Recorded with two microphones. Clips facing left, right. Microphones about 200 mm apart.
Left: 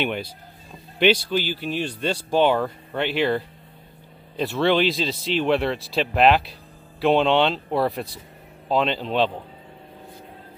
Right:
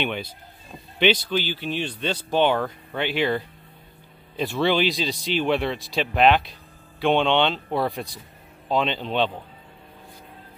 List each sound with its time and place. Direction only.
0.0 s speech: 5° left (ahead or behind)